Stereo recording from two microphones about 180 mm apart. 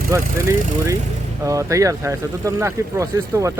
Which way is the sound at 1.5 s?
15° right (ahead or behind).